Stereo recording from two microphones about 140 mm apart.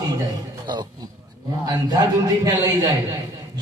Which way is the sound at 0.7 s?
30° right (ahead or behind).